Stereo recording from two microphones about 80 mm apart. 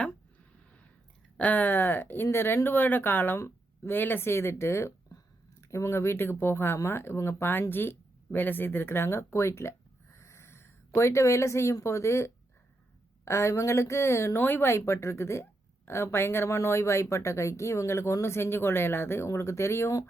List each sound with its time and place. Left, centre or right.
1.4 s speech: left